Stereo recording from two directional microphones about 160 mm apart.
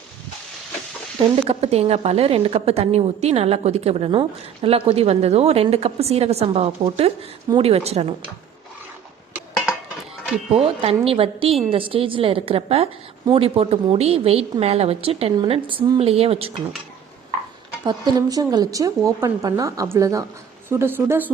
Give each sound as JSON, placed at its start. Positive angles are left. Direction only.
{"t": 1.5, "sound": "a woman's voice", "side_deg": -40}
{"t": 10.5, "sound": "a woman's voice", "side_deg": -35}
{"t": 17.8, "sound": "a woman's voice", "side_deg": -25}